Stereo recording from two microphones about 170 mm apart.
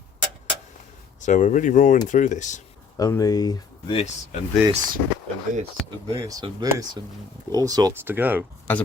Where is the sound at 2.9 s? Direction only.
20° left (ahead or behind).